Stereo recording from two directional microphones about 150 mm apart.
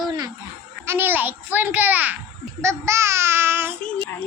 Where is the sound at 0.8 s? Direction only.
15° right (ahead or behind).